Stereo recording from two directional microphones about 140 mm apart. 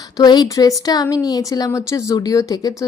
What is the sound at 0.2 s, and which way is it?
A woman's voice, 30° left (ahead or behind).